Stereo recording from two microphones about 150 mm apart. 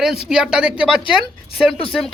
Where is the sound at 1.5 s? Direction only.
40° left (ahead or behind).